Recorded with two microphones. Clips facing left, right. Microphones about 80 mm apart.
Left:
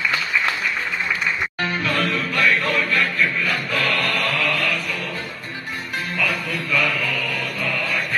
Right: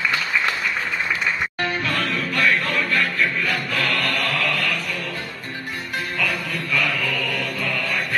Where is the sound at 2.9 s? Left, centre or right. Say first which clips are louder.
Left 1 dB; right.